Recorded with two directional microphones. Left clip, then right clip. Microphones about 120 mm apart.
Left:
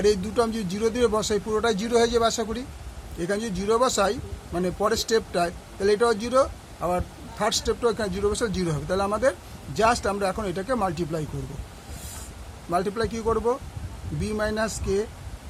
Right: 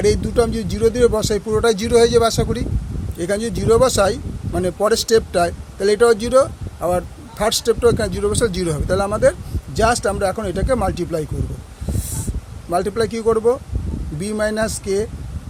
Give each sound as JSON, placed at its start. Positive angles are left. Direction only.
{"t": 0.0, "sound": "speech", "side_deg": -45}
{"t": 12.7, "sound": "speech", "side_deg": -55}